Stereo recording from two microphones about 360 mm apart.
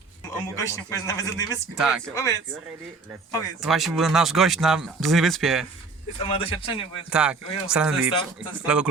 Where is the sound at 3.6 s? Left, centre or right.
Centre.